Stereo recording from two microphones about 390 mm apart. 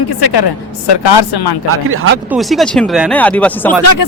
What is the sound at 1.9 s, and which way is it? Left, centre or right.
Speech, right.